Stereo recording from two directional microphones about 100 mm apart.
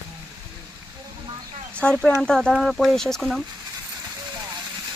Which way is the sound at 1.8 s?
10° left (ahead or behind).